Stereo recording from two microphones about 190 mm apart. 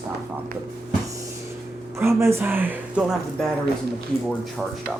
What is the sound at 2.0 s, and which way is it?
Speech, 15° right (ahead or behind).